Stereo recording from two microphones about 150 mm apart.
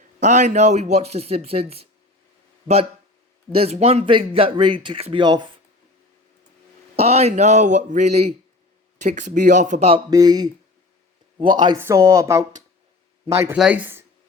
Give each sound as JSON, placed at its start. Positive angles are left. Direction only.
{"t": 0.2, "sound": "speech", "side_deg": -55}
{"t": 3.5, "sound": "speech", "side_deg": -40}
{"t": 6.9, "sound": "speech", "side_deg": -45}
{"t": 10.1, "sound": "a woman's voice", "side_deg": -25}